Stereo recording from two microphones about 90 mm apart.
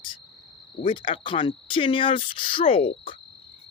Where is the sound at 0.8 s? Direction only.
70° left (ahead or behind); by 3.2 s 90° left.